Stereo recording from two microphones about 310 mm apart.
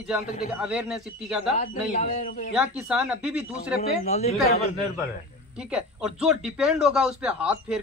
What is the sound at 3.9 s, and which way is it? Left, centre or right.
Speech, left.